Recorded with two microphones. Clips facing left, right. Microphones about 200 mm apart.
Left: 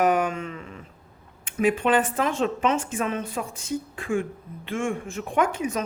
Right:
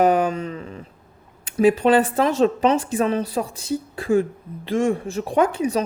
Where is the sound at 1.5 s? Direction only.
35° right (ahead or behind).